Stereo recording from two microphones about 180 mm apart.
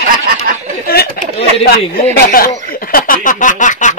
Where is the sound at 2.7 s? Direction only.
55° left (ahead or behind).